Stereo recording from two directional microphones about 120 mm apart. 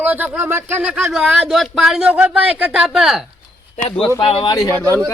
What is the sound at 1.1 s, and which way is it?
Speech, 5° right (ahead or behind).